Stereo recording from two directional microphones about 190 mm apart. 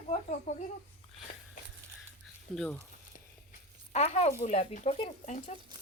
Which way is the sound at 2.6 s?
10° left (ahead or behind).